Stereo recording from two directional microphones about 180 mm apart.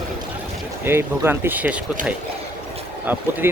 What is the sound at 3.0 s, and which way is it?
Speech, 10° right (ahead or behind).